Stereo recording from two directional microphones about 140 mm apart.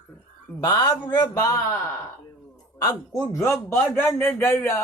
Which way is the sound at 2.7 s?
25° left (ahead or behind).